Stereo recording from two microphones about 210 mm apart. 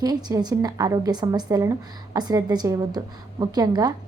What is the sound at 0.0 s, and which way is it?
A woman's voice, 20° right (ahead or behind).